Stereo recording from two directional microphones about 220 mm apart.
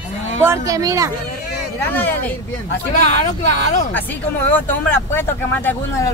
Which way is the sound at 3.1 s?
35° left (ahead or behind).